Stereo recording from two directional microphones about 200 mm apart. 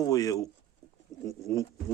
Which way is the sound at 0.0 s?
15° left (ahead or behind).